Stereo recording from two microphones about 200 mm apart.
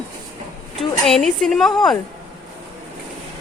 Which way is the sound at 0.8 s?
Centre (ahead or behind).